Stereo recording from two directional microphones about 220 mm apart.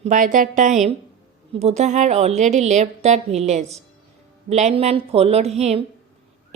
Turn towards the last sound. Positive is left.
turn(degrees=-30)  # may be behind; listen again after turning